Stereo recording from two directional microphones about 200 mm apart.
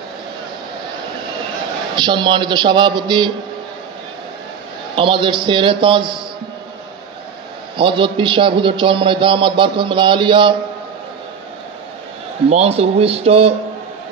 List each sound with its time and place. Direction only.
2.0 s a man's voice: 25° right (ahead or behind)
4.9 s a man's voice: 25° right (ahead or behind)
7.7 s a man's voice: 25° right (ahead or behind)
12.4 s speech: 30° right (ahead or behind)